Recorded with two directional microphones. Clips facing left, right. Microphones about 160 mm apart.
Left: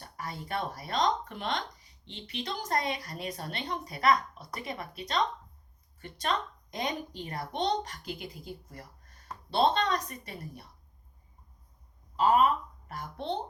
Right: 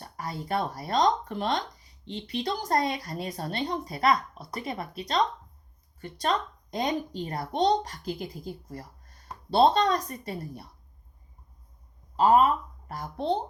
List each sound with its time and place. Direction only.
0.2 s speech: 35° right (ahead or behind)
9.5 s speech: 40° right (ahead or behind)
12.1 s speech: 35° right (ahead or behind)